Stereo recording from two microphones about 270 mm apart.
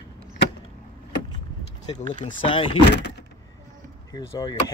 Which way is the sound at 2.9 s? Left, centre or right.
Left.